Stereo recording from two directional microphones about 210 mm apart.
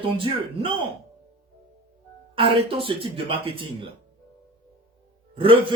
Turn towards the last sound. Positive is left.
turn(degrees=-25)  # may be behind; listen again after turning